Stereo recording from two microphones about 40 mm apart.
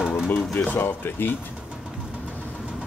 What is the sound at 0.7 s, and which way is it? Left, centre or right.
Speech, left.